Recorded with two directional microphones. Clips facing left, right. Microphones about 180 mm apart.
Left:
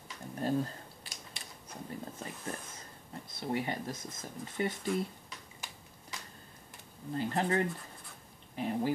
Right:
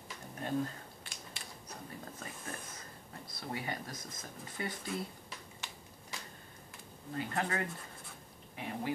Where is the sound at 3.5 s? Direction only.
25° left (ahead or behind).